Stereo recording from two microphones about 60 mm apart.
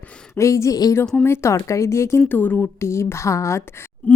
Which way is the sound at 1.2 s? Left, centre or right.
Left.